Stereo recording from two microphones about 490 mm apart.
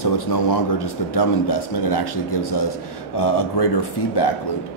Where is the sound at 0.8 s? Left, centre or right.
Left.